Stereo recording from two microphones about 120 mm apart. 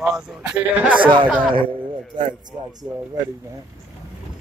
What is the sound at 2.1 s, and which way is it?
Speech, 40° right (ahead or behind).